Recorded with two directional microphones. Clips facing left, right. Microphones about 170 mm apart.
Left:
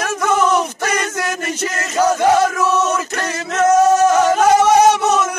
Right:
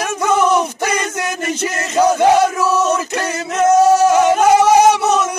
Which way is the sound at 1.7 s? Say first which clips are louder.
Right 2 dB; 15° right (ahead or behind).